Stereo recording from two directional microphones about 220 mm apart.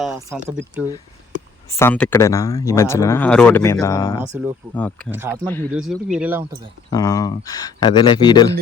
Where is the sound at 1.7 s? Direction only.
10° left (ahead or behind).